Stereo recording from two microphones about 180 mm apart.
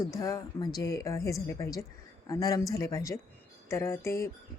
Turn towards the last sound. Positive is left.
turn(degrees=15)  # may be behind; listen again after turning